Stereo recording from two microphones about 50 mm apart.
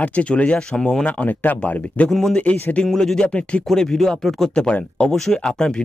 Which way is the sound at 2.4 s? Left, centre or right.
Left.